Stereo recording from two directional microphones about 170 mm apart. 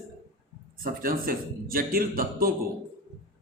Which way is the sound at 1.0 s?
60° right (ahead or behind).